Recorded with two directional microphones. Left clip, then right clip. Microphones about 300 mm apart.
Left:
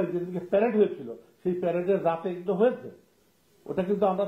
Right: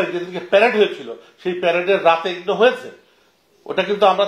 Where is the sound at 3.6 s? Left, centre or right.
Centre.